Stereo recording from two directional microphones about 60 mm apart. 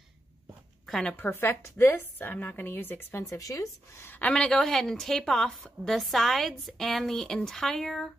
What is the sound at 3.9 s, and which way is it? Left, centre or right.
Speech, left.